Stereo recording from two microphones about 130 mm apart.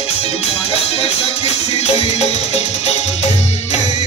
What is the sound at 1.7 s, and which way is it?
Music, 55° left (ahead or behind).